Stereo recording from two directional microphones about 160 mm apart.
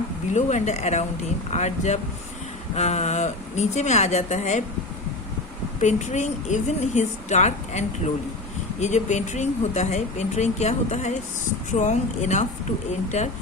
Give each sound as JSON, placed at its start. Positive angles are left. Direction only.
{"t": 0.3, "sound": "speech", "side_deg": 45}
{"t": 5.8, "sound": "speech", "side_deg": 45}